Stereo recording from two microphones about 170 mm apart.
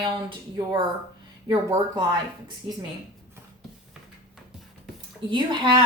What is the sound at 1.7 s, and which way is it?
Speech, 25° right (ahead or behind).